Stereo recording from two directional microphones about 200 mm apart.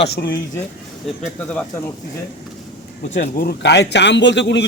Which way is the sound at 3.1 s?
50° left (ahead or behind).